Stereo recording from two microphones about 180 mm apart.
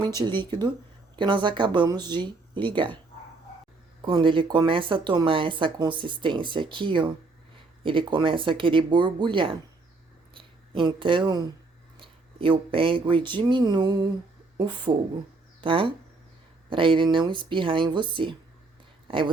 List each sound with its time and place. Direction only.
0.0 s speech: 25° right (ahead or behind)
4.0 s speech: 25° right (ahead or behind)